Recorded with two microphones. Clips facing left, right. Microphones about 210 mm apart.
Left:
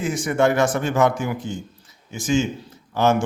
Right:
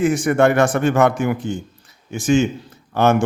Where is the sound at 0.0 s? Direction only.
60° right (ahead or behind).